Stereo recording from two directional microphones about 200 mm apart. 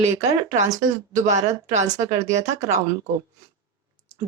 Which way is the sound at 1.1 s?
35° right (ahead or behind).